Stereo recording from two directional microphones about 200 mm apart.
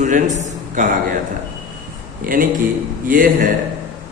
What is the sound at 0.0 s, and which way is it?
Speech, 40° right (ahead or behind).